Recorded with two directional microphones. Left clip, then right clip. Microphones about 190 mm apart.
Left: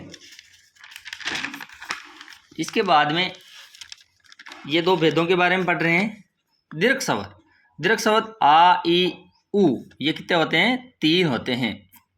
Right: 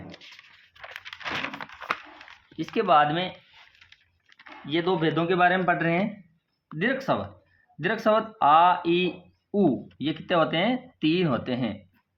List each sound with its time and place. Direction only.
1.1 s a sound: 35° right (ahead or behind)
2.6 s speech: 15° left (ahead or behind)
4.6 s speech: 20° left (ahead or behind)